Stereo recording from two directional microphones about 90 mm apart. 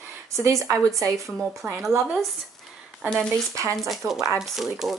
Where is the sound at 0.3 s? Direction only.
35° right (ahead or behind).